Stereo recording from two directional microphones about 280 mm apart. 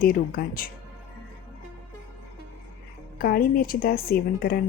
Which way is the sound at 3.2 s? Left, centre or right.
Left.